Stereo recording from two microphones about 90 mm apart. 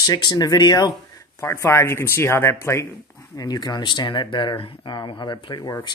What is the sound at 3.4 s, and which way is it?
Speech, 50° left (ahead or behind).